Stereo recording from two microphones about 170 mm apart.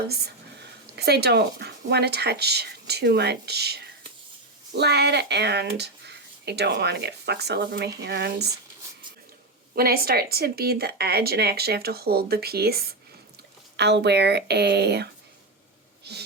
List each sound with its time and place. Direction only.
0.9 s speech: 75° right (ahead or behind)
9.7 s speech: 65° right (ahead or behind)
13.7 s speech: 85° right